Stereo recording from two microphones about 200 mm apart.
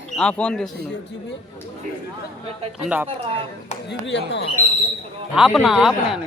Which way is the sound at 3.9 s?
60° left (ahead or behind).